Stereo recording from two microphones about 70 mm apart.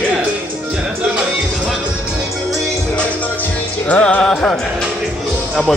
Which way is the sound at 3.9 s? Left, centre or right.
Centre.